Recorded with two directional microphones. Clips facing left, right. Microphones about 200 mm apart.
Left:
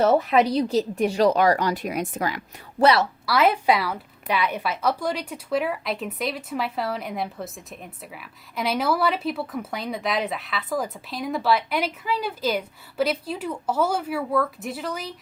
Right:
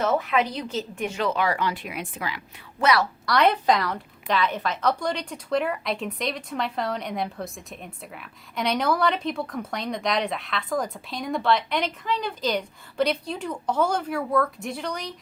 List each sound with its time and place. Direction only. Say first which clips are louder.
0.0 s speech: left 5 dB; 35° left (ahead or behind)
3.2 s a woman's voice: even; 5° left (ahead or behind)